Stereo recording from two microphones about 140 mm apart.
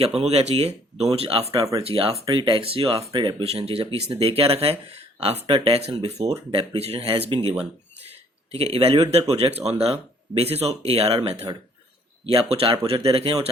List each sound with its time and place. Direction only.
0.2 s speech: 50° right (ahead or behind)
1.5 s speech: 25° right (ahead or behind)
1.8 s speech: 45° right (ahead or behind)
8.5 s speech: 45° right (ahead or behind)